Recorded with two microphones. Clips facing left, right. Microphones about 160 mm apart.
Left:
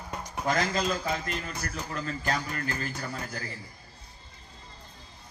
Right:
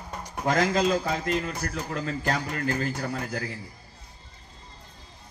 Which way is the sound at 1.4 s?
50° right (ahead or behind).